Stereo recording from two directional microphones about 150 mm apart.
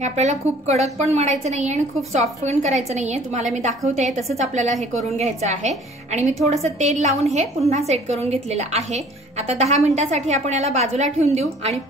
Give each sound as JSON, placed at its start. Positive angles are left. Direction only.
{"t": 0.0, "sound": "a woman's voice", "side_deg": -50}